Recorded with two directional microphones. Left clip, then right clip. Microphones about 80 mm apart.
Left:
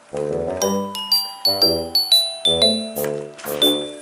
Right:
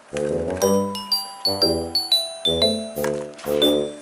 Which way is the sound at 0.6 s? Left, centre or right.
Left.